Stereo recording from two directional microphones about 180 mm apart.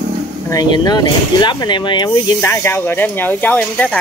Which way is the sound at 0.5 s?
25° left (ahead or behind).